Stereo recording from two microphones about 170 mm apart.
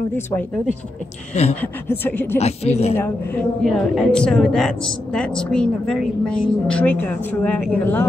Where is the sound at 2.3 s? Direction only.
40° left (ahead or behind).